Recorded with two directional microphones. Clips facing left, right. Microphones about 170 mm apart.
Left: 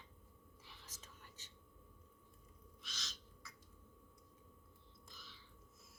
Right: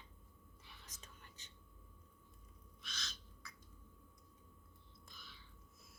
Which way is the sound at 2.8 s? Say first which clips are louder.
Right 3 dB; 55° right (ahead or behind).